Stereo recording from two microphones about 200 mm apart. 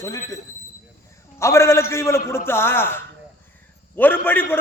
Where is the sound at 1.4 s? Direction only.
15° left (ahead or behind).